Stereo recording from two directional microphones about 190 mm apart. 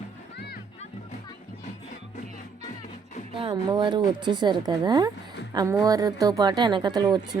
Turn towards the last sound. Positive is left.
turn(degrees=-20)  # may be behind; listen again after turning